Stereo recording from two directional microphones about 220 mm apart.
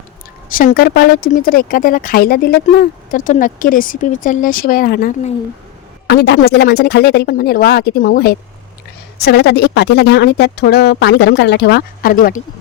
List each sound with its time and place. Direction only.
0.5 s speech: 40° left (ahead or behind)
6.1 s speech: 50° left (ahead or behind)